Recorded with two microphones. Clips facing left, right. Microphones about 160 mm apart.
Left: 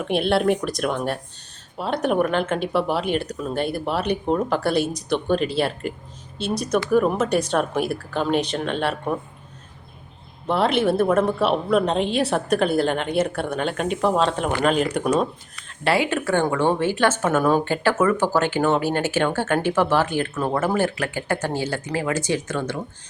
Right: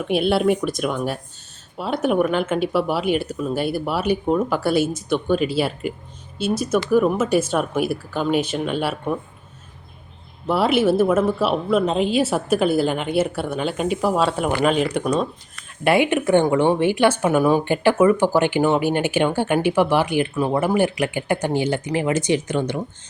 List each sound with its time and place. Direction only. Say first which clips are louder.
0.1 s a woman's voice: right 1 dB; centre (ahead or behind)
10.5 s a woman's voice: right 2 dB; 5° right (ahead or behind)
15.8 s speech: right 4 dB; 15° right (ahead or behind)